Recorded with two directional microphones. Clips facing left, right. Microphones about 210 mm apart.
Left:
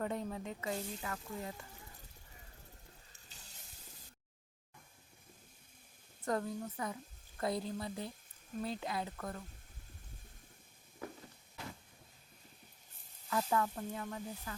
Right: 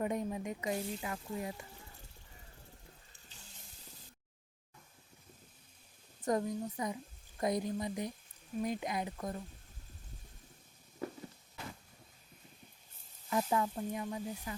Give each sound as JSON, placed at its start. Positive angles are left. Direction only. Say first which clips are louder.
{"t": 0.0, "sound": "speech", "louder": "right 3 dB", "side_deg": -15}
{"t": 6.2, "sound": "a woman's voice", "louder": "right 3 dB", "side_deg": -15}
{"t": 13.3, "sound": "speech", "louder": "right 2 dB", "side_deg": -15}